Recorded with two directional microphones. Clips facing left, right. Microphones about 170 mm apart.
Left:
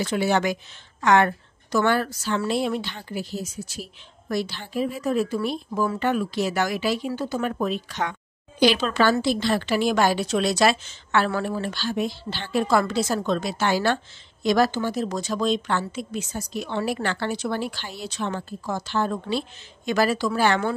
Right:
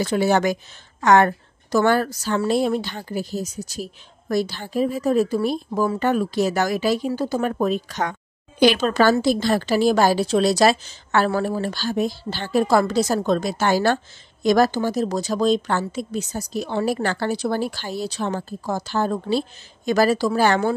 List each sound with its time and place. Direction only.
0.0 s a woman's voice: 40° right (ahead or behind)